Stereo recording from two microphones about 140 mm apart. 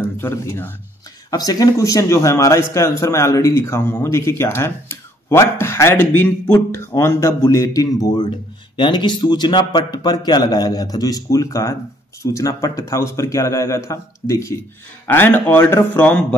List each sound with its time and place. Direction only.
0.2 s speech: 15° left (ahead or behind)
1.3 s speech: 25° left (ahead or behind)